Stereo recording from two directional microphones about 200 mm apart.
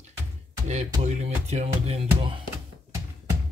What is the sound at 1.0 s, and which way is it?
Music, 35° right (ahead or behind).